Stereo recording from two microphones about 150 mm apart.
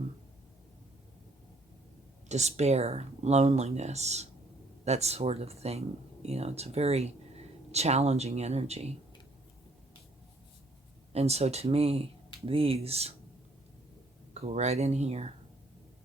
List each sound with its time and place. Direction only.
2.3 s speech: 50° right (ahead or behind)
11.1 s speech: 45° right (ahead or behind)
14.3 s speech: 45° right (ahead or behind)